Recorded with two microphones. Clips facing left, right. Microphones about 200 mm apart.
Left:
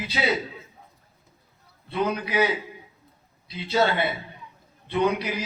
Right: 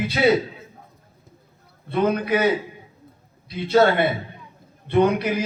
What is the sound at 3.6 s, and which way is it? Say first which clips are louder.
A man's voice: right 6 dB; 50° right (ahead or behind).